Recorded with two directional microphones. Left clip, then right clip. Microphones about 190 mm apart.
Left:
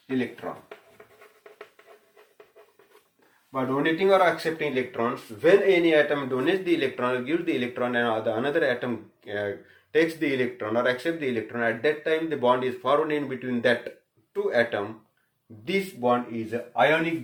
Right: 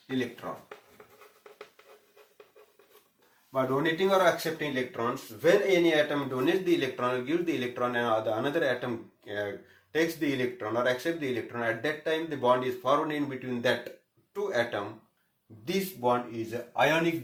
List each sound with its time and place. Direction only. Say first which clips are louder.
0.4 s speech: left 3 dB; 30° left (ahead or behind)
3.5 s speech: left 2 dB; 30° left (ahead or behind)